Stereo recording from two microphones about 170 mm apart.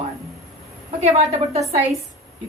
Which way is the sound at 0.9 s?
40° right (ahead or behind).